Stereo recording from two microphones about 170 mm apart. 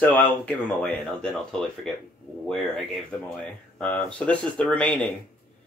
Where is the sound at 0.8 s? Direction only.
5° left (ahead or behind).